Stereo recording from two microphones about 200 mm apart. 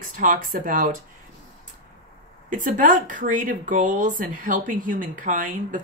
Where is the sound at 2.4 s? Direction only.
40° right (ahead or behind).